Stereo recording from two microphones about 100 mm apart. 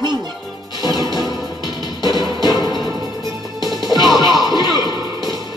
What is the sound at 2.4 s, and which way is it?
Music, 45° left (ahead or behind).